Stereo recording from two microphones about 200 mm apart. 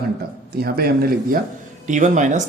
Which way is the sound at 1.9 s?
40° right (ahead or behind).